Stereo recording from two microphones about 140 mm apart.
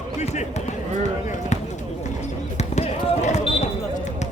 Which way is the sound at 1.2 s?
55° left (ahead or behind).